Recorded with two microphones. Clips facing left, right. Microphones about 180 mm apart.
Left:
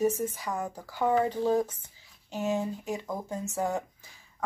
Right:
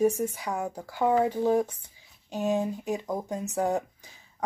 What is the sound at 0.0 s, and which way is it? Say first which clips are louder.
Speech: right 3 dB; 15° right (ahead or behind).